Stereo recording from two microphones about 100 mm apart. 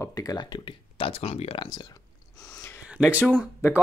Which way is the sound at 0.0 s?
35° left (ahead or behind).